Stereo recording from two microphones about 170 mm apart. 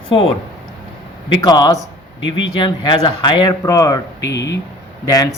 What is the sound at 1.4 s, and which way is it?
Speech, 25° left (ahead or behind).